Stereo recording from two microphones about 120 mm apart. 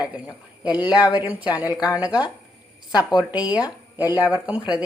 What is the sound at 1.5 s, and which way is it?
Speech, 30° left (ahead or behind).